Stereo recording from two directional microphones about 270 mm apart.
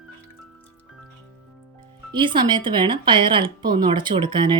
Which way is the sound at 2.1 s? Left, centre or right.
Centre.